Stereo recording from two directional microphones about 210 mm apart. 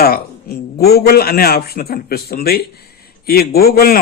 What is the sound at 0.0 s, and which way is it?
Speech, 50° left (ahead or behind).